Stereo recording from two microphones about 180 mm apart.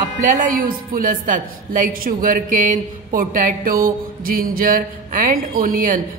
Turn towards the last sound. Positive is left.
turn(degrees=-50)  # may be behind; listen again after turning